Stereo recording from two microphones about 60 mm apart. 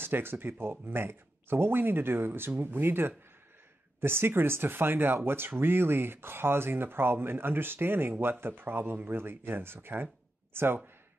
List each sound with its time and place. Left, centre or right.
0.0 s speech: right